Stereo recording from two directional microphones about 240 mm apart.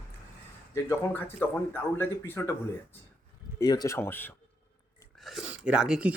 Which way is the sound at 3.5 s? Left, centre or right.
Centre.